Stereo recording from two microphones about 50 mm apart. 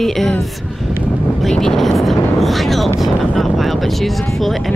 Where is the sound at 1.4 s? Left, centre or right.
Centre.